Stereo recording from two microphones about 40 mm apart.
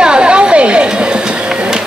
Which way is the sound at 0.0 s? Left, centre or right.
Right.